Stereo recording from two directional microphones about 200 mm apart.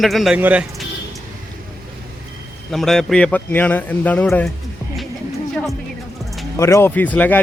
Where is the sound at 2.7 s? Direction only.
Centre (ahead or behind).